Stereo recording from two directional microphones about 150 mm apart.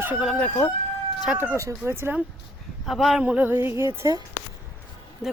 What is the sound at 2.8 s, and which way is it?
Speech, centre (ahead or behind).